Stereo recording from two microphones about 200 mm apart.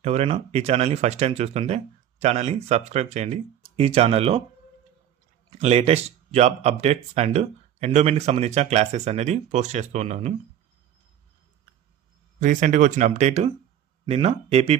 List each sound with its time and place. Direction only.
0.0 s speech: 30° right (ahead or behind)
5.5 s speech: 30° right (ahead or behind)
12.4 s speech: 40° right (ahead or behind)